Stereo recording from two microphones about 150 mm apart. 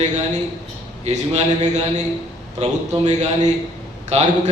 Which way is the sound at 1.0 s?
45° right (ahead or behind).